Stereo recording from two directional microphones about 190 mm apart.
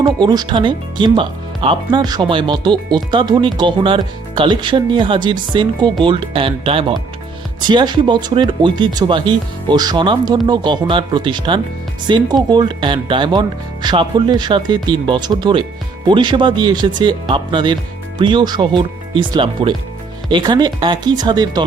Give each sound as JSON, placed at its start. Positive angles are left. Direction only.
{"t": 0.0, "sound": "speech", "side_deg": -25}